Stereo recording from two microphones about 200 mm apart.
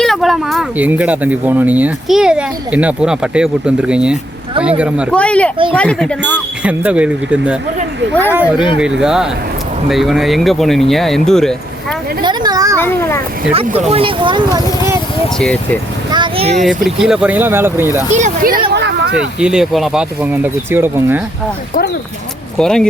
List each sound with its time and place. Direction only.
0.0 s speech: centre (ahead or behind)
5.1 s speech: 5° left (ahead or behind)
6.3 s speech: 5° right (ahead or behind)
12.2 s speech: 20° right (ahead or behind)
12.8 s a child's voice: 10° left (ahead or behind)
13.5 s speech: 30° right (ahead or behind)
15.4 s speech: 5° left (ahead or behind)
16.1 s speech: 25° right (ahead or behind)
16.6 s speech: centre (ahead or behind)
18.1 s speech: 40° right (ahead or behind)
18.7 s a sound: 60° right (ahead or behind)
19.4 s speech: 5° right (ahead or behind)
22.5 s speech: 5° left (ahead or behind)